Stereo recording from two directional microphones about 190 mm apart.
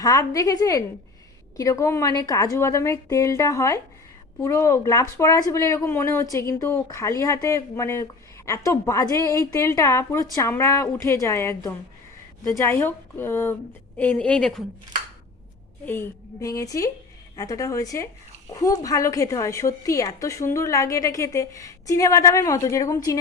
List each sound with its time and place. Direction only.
0.0 s a woman's voice: 20° left (ahead or behind)
15.9 s a woman's voice: 15° left (ahead or behind)